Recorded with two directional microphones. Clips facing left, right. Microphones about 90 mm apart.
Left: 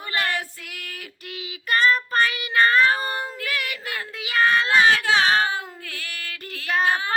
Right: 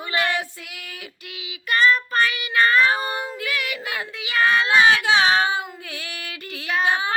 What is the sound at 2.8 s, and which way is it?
Child singing, 10° right (ahead or behind).